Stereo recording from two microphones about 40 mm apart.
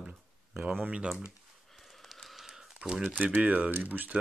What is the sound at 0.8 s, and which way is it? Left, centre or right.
Speech, right.